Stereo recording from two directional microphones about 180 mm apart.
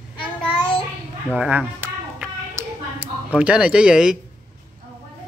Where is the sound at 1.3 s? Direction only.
5° right (ahead or behind).